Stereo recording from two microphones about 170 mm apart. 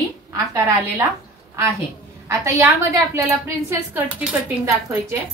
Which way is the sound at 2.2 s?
15° right (ahead or behind).